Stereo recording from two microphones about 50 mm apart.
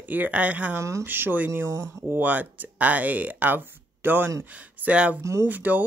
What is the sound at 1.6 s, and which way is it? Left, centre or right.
Speech, right.